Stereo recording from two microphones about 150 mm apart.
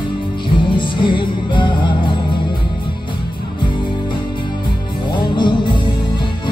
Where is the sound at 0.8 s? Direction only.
35° left (ahead or behind).